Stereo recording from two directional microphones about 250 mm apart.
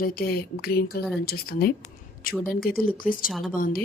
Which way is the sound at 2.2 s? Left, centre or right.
Left.